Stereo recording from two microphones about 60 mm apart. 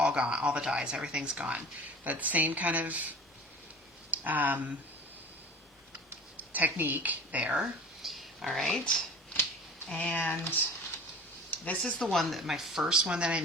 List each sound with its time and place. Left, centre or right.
0.0 s speech: centre
4.1 s speech: right
6.3 s speech: right
8.0 s a sound: centre
8.8 s a sound: centre
10.2 s speech: left
12.1 s speech: centre